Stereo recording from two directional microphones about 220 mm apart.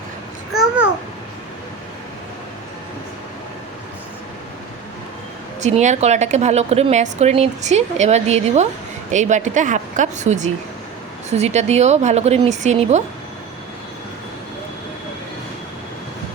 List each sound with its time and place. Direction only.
5.5 s a woman's voice: 30° right (ahead or behind)